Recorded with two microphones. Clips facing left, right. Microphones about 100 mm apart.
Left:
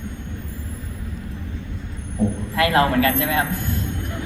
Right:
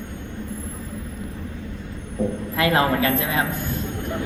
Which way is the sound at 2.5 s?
25° right (ahead or behind).